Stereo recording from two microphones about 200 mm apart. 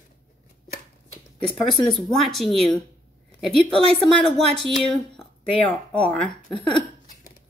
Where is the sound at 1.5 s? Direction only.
Centre (ahead or behind).